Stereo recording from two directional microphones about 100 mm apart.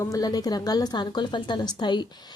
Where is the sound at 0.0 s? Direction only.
40° left (ahead or behind).